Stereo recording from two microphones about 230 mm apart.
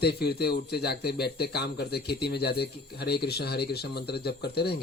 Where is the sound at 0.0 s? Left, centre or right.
Left.